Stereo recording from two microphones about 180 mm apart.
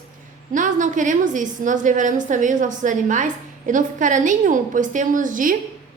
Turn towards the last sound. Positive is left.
turn(degrees=-45)  # may be behind; listen again after turning